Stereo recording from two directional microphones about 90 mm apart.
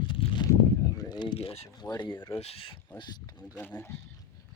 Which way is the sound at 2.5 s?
90° left.